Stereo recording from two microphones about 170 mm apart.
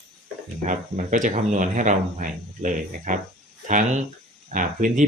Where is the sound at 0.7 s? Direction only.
45° right (ahead or behind).